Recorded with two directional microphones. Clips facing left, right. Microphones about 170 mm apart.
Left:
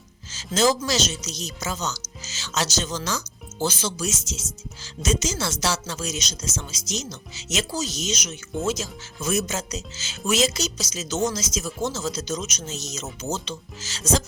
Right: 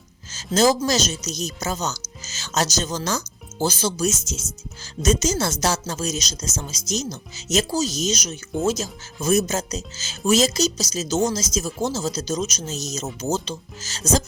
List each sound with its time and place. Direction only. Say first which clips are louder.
0.3 s speech: right 3 dB; 45° right (ahead or behind)